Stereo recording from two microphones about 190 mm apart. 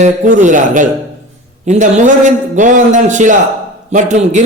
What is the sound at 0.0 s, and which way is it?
A man's voice, 40° right (ahead or behind).